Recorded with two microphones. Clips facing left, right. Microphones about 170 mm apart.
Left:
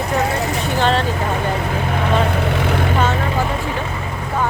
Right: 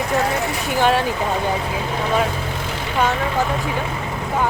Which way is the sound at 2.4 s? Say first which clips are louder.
Left 8 dB; 65° left (ahead or behind).